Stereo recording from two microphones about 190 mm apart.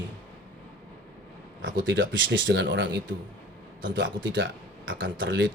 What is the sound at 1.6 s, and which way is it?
Speech, 75° right (ahead or behind).